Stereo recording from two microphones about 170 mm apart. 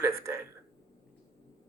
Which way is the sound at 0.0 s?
15° right (ahead or behind).